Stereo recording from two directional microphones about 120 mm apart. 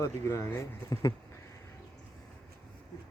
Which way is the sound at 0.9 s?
30° left (ahead or behind).